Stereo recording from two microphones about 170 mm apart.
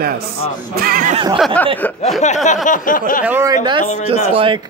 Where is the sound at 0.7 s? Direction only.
60° right (ahead or behind).